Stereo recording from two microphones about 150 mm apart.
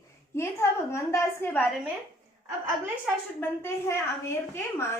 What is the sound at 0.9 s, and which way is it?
Speech, 20° left (ahead or behind).